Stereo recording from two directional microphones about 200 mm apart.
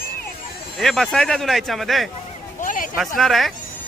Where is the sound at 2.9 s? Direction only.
Centre (ahead or behind).